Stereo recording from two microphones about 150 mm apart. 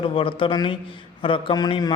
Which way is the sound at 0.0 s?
35° left (ahead or behind).